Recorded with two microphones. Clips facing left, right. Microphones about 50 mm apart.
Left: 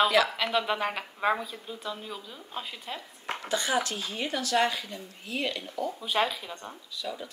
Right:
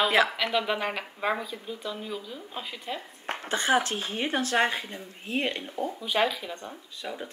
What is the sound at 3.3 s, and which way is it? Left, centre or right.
Speech, right.